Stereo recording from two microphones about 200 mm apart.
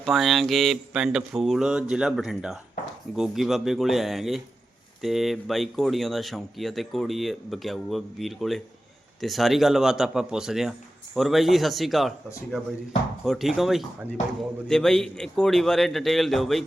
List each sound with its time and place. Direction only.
0.0 s speech: centre (ahead or behind)
13.2 s speech: centre (ahead or behind)